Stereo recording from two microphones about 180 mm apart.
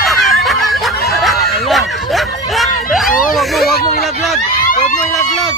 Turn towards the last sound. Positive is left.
turn(degrees=45)  # may be behind; listen again after turning